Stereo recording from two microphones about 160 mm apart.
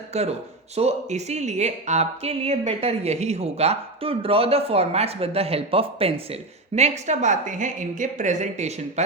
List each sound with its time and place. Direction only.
0.1 s speech: 40° right (ahead or behind)